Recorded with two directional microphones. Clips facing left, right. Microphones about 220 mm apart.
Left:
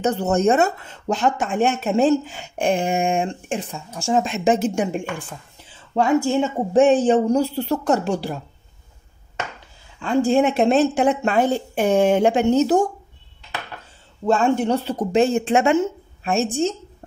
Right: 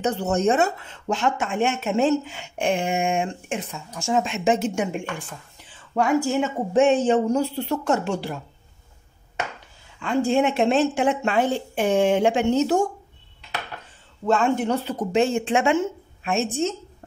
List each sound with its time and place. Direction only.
0.0 s speech: 45° left (ahead or behind)
6.2 s speech: 35° left (ahead or behind)
10.3 s speech: 40° left (ahead or behind)
14.2 s speech: 30° left (ahead or behind)